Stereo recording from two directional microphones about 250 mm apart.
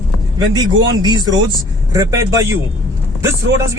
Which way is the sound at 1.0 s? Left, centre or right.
Centre.